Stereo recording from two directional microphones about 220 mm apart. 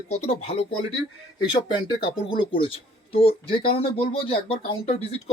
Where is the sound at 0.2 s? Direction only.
30° left (ahead or behind).